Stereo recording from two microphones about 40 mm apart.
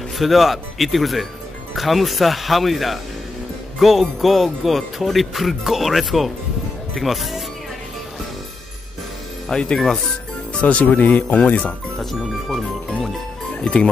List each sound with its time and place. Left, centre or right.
0.2 s speech: centre
9.5 s speech: left
10.6 s speech: left
12.0 s speech: centre
13.6 s speech: left